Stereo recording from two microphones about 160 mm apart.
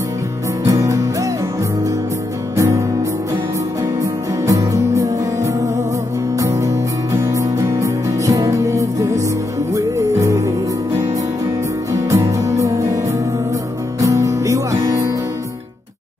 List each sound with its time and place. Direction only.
0.7 s music: 20° right (ahead or behind)
2.5 s music: 20° right (ahead or behind)
4.0 s music: 20° right (ahead or behind)
11.9 s music: 20° right (ahead or behind)
14.0 s music: 20° right (ahead or behind)